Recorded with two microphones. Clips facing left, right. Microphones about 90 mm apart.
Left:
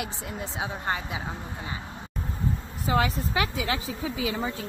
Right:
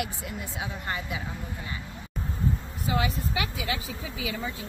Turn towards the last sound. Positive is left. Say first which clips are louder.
# left 4 dB
turn(degrees=70)  # may be behind; listen again after turning